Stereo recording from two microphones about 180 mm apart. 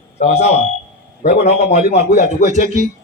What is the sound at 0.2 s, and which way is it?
A man's voice, 40° left (ahead or behind).